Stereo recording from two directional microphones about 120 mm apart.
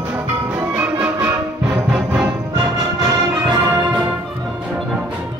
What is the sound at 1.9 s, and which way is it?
Music, 10° right (ahead or behind).